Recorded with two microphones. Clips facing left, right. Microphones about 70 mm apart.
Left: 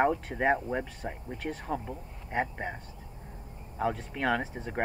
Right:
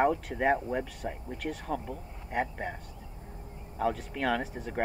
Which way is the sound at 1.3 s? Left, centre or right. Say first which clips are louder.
Left 1 dB; left.